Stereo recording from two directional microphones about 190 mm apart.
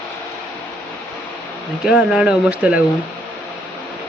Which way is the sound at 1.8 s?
5° right (ahead or behind).